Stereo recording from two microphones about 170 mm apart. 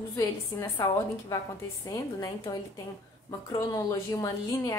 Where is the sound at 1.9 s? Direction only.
20° left (ahead or behind).